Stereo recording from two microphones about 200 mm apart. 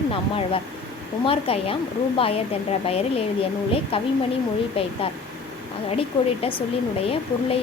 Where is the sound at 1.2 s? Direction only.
30° left (ahead or behind).